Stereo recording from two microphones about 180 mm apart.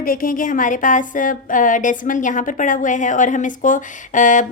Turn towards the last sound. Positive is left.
turn(degrees=45)  # may be behind; listen again after turning